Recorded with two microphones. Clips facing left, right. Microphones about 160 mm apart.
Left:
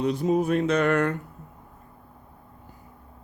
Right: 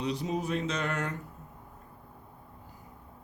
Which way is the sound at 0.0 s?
50° left (ahead or behind).